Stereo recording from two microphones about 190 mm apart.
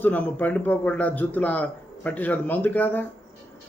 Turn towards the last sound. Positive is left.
turn(degrees=10)  # may be behind; listen again after turning